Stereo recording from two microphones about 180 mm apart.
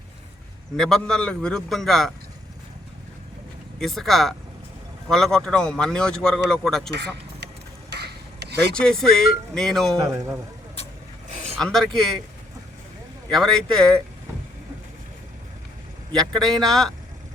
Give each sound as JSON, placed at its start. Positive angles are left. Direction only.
{"t": 0.8, "sound": "speech", "side_deg": 0}
{"t": 3.8, "sound": "speech", "side_deg": 0}
{"t": 6.9, "sound": "a sound", "side_deg": -70}
{"t": 8.7, "sound": "speech", "side_deg": 5}
{"t": 11.3, "sound": "vehicle", "side_deg": -40}
{"t": 11.5, "sound": "speech", "side_deg": 0}
{"t": 13.3, "sound": "speech", "side_deg": 0}
{"t": 16.1, "sound": "speech", "side_deg": 0}